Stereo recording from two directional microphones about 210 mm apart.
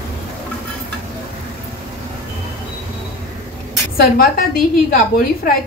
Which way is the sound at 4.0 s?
45° left (ahead or behind).